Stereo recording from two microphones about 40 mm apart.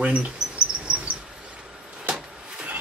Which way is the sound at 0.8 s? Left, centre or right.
Right.